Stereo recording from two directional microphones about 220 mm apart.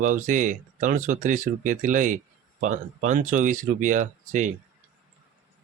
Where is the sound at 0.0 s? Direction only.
35° right (ahead or behind).